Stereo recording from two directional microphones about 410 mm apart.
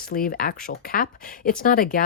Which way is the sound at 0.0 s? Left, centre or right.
Left.